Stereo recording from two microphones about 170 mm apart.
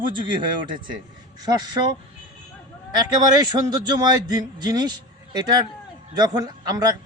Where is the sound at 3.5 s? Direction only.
25° right (ahead or behind).